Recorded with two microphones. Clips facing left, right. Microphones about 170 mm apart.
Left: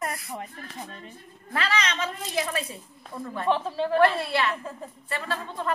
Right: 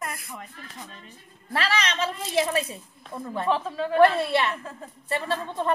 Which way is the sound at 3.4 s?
35° left (ahead or behind).